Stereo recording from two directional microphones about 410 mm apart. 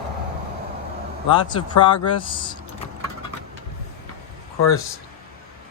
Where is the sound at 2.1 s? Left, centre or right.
Centre.